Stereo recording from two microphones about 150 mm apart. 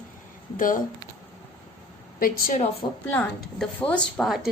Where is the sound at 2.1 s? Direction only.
70° left (ahead or behind).